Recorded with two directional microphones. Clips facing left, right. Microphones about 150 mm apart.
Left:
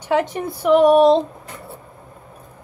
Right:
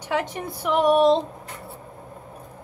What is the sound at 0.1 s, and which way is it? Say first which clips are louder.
A woman's voice: left 6 dB; 35° left (ahead or behind).